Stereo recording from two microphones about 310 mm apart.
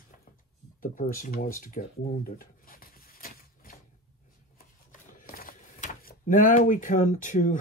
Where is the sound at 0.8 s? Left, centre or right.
Left.